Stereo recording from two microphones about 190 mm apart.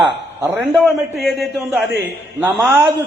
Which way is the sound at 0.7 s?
Centre (ahead or behind).